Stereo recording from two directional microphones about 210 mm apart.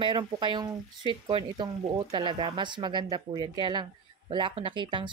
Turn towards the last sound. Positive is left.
turn(degrees=-25)  # may be behind; listen again after turning